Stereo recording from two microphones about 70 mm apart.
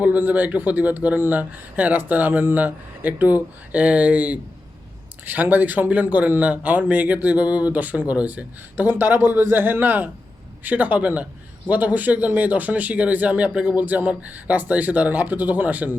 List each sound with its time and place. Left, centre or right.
0.0 s a man's voice: right